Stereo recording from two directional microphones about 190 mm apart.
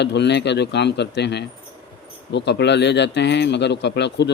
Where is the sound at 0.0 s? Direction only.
65° left (ahead or behind).